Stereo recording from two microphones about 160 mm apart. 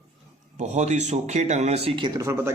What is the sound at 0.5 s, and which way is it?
A man's voice, 45° right (ahead or behind).